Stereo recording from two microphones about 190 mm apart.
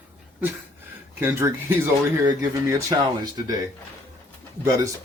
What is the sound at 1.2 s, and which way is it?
Speech, 10° right (ahead or behind).